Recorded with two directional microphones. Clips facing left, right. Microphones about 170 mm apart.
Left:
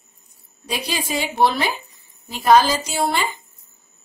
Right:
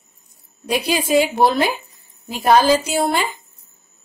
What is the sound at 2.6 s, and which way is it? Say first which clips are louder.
Speech: right 7 dB; 15° right (ahead or behind).